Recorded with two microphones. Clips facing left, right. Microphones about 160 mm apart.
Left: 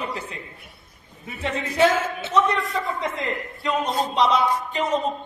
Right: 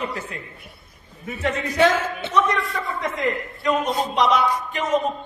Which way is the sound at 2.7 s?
25° left (ahead or behind).